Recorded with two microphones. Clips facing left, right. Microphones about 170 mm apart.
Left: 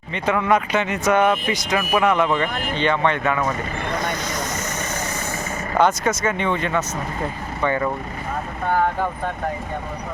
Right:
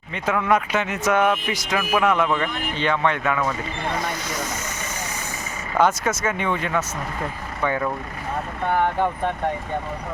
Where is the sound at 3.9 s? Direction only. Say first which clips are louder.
Left 2 dB; 5° right (ahead or behind).